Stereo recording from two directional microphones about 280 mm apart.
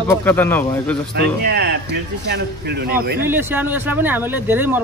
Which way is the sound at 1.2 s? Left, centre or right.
Right.